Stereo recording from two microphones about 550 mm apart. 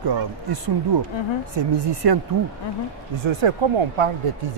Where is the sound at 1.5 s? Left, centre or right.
Right.